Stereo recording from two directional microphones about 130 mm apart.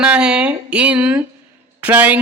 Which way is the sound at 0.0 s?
5° right (ahead or behind).